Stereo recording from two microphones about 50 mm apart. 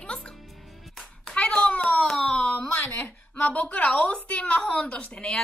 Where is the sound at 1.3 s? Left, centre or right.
Left.